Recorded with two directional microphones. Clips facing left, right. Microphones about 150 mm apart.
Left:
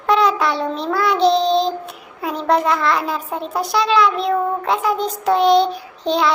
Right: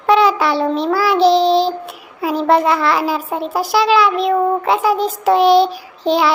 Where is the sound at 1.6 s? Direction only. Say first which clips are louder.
Right 3 dB; 5° right (ahead or behind).